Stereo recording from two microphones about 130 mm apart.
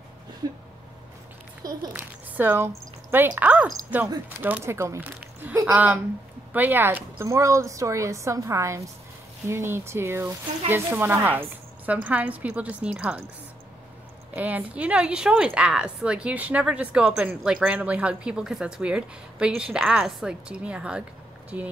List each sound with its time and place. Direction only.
1.6 s a child's voice: 30° right (ahead or behind)
2.0 s a woman's voice: 15° right (ahead or behind)
14.3 s speech: 10° right (ahead or behind)